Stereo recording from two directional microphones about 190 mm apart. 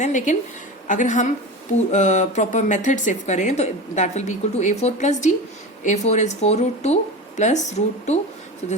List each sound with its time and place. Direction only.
0.0 s speech: 40° left (ahead or behind)